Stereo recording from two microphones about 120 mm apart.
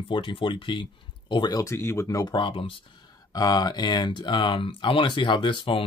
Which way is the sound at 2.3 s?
45° left (ahead or behind).